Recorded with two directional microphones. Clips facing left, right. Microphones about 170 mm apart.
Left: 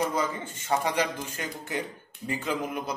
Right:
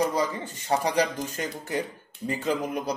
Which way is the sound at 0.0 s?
35° right (ahead or behind).